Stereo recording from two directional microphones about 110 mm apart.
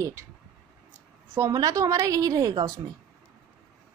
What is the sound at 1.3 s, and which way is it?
A woman's voice, 30° right (ahead or behind).